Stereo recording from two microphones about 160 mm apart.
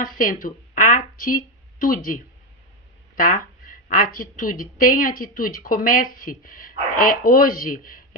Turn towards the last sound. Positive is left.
turn(degrees=60)  # may be behind; listen again after turning